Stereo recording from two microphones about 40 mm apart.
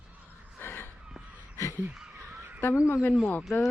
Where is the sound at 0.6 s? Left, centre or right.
Left.